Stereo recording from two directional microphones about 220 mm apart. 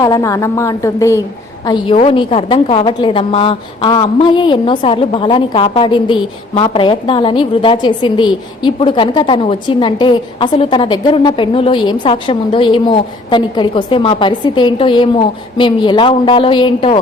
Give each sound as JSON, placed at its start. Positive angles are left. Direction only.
{"t": 0.0, "sound": "a woman's voice", "side_deg": 15}